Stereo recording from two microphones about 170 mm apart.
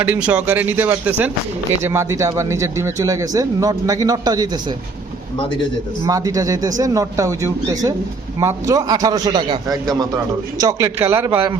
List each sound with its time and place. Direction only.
0.0 s speech: 10° right (ahead or behind)
6.1 s speech: 20° right (ahead or behind)